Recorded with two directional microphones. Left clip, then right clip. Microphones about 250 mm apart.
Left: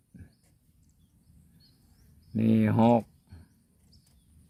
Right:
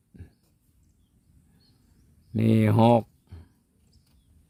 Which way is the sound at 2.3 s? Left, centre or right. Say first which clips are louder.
Right 3 dB; right.